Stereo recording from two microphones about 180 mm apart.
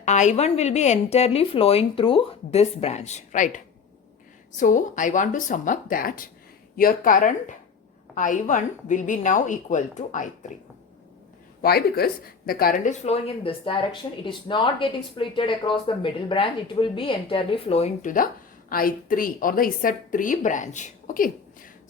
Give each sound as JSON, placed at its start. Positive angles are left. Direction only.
{"t": 0.0, "sound": "a woman's voice", "side_deg": 40}
{"t": 11.6, "sound": "speech", "side_deg": 60}
{"t": 18.7, "sound": "a woman's voice", "side_deg": 50}